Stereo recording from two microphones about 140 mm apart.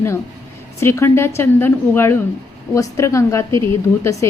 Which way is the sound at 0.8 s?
20° left (ahead or behind).